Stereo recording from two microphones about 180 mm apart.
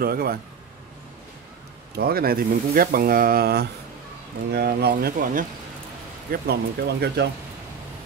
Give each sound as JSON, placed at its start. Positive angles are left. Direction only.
{"t": 0.0, "sound": "speech", "side_deg": -55}
{"t": 2.0, "sound": "speech", "side_deg": -60}